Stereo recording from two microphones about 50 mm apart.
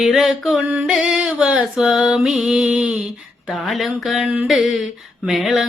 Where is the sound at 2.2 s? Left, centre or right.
Centre.